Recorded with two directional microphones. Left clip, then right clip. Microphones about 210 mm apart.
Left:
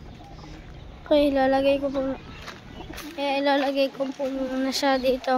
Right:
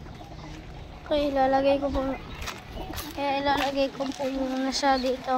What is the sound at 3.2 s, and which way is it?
A child's voice, 30° left (ahead or behind).